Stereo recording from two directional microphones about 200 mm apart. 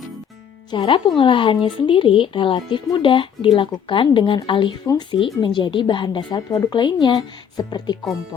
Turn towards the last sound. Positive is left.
turn(degrees=20)  # may be behind; listen again after turning